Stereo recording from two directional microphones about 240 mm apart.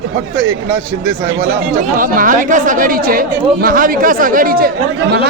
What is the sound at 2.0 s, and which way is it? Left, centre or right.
Speech, right.